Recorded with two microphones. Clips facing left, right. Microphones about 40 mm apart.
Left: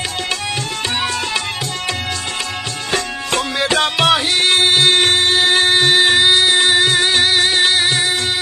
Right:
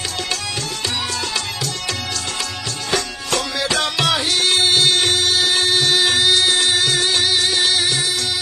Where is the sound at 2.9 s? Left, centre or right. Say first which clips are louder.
Left 1 dB; left.